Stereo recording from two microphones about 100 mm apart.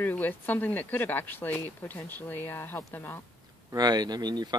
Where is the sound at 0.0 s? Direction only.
20° left (ahead or behind).